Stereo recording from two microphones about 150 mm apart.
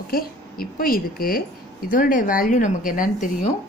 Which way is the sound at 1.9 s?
65° left (ahead or behind).